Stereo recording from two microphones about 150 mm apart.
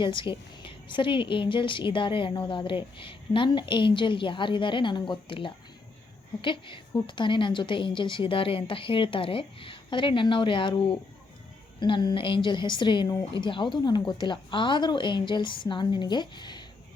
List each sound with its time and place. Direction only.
0.0 s a woman's voice: 35° left (ahead or behind)